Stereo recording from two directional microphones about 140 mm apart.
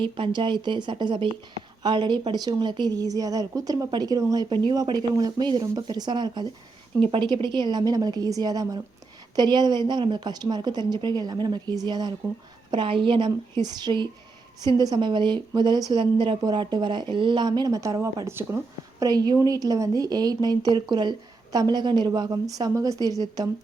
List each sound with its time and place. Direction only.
0.0 s speech: 35° right (ahead or behind)